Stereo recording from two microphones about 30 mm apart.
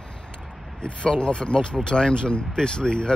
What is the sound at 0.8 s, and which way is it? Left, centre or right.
Speech, left.